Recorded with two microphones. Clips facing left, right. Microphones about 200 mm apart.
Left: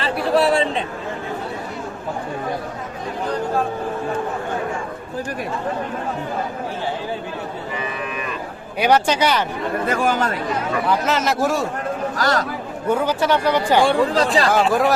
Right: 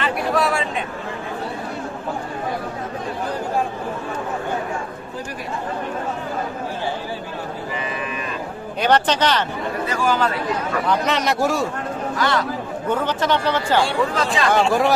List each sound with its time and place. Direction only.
0.0 s a sound: 30° left (ahead or behind)
8.8 s speech: 10° left (ahead or behind)
9.8 s speech: 55° left (ahead or behind)
10.8 s a man's voice: centre (ahead or behind)
12.1 s a man's voice: 40° left (ahead or behind)
12.9 s speech: 10° left (ahead or behind)
14.2 s a man's voice: 35° left (ahead or behind)
14.5 s a man's voice: centre (ahead or behind)